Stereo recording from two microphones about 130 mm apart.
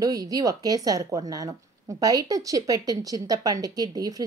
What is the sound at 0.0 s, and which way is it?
Speech, 25° right (ahead or behind).